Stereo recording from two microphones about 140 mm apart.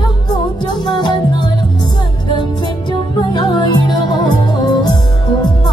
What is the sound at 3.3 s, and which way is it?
Music, 35° left (ahead or behind).